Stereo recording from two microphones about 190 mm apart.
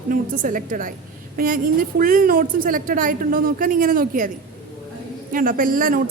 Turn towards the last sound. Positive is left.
turn(degrees=-45)  # may be behind; listen again after turning